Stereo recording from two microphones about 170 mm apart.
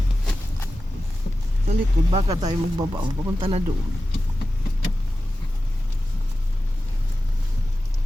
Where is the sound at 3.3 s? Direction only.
35° right (ahead or behind).